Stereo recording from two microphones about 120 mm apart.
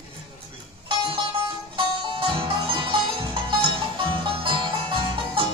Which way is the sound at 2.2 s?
45° right (ahead or behind).